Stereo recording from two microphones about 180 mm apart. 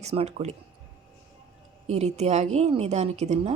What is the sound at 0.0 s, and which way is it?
Speech, 35° right (ahead or behind).